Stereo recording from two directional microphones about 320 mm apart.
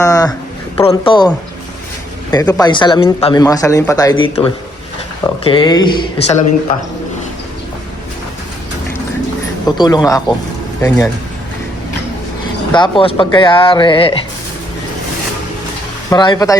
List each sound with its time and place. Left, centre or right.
0.0 s a man's voice: centre
2.3 s speech: centre
9.6 s speech: centre
12.7 s speech: centre
16.0 s speech: centre